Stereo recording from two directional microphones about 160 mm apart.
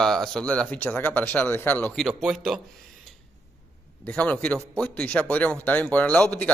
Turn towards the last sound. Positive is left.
turn(degrees=10)  # may be behind; listen again after turning